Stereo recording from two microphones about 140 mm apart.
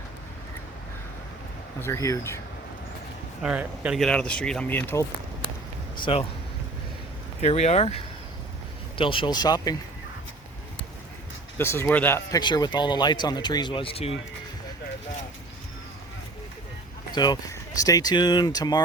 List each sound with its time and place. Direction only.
1.8 s speech: 20° left (ahead or behind)
3.4 s speech: 10° right (ahead or behind)
4.0 s speech: 5° left (ahead or behind)
6.1 s speech: 40° left (ahead or behind)
7.4 s speech: 50° left (ahead or behind)
9.0 s speech: 35° left (ahead or behind)
11.5 s speech: 15° left (ahead or behind)
12.3 s speech: 30° left (ahead or behind)
17.1 s speech: 30° left (ahead or behind)